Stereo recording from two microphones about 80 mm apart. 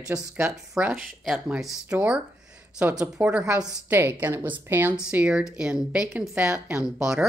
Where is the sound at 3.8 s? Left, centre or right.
Right.